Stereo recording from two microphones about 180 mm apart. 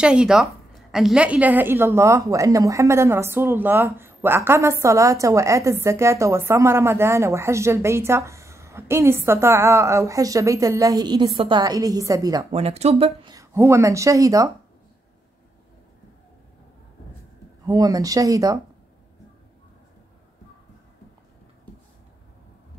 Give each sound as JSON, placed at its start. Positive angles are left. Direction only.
{"t": 0.0, "sound": "a woman's voice", "side_deg": -5}
{"t": 12.4, "sound": "speech", "side_deg": -35}
{"t": 13.3, "sound": "a woman's voice", "side_deg": -15}
{"t": 17.6, "sound": "speech", "side_deg": -20}